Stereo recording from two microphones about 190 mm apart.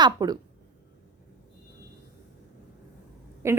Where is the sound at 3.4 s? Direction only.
15° right (ahead or behind).